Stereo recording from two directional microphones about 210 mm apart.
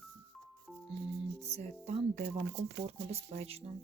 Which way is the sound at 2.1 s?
55° right (ahead or behind).